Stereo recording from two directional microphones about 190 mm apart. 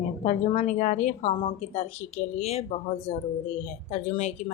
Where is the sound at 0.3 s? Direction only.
40° left (ahead or behind).